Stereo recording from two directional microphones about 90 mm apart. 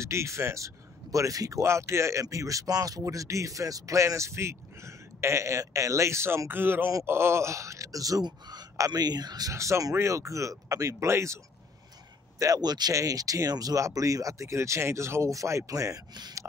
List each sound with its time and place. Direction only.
0.0 s speech: 30° right (ahead or behind); by 9.5 s 50° right (ahead or behind)
9.5 s speech: 35° right (ahead or behind)
12.4 s speech: 45° right (ahead or behind)